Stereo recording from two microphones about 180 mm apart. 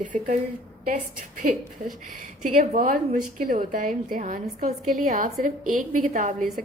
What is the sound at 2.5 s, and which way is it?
A woman's voice, 45° right (ahead or behind).